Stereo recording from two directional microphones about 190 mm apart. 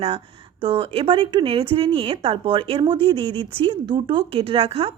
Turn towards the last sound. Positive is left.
turn(degrees=-30)  # may be behind; listen again after turning